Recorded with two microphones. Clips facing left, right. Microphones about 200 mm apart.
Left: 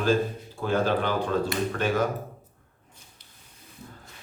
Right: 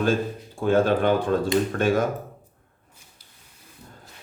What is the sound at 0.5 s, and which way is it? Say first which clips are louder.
Speech: right 5 dB; 50° right (ahead or behind).